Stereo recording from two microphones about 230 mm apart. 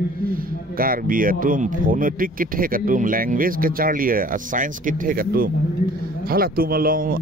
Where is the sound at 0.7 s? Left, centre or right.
Right.